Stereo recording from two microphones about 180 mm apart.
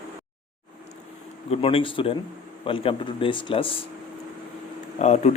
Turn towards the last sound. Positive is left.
turn(degrees=40)  # may be behind; listen again after turning